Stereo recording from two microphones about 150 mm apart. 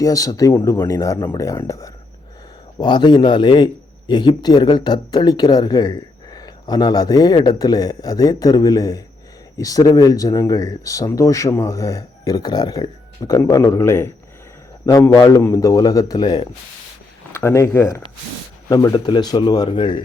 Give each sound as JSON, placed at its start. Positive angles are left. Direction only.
{"t": 0.0, "sound": "speech", "side_deg": 25}
{"t": 2.7, "sound": "speech", "side_deg": 30}